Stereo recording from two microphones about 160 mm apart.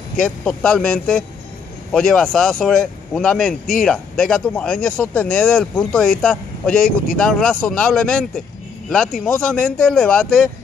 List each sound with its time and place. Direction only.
0.2 s speech: 5° left (ahead or behind)